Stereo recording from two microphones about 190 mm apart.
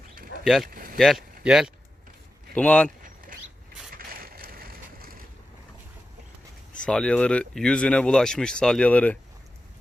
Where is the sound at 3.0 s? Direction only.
45° right (ahead or behind).